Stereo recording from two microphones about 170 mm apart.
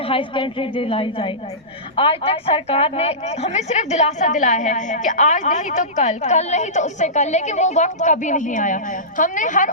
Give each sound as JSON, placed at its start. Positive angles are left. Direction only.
{"t": 0.0, "sound": "a woman's voice", "side_deg": 30}